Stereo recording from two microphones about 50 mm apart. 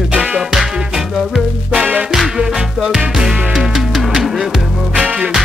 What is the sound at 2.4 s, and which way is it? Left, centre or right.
Music, centre.